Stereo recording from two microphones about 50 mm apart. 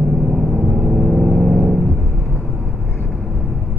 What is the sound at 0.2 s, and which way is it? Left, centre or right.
Vehicle, centre.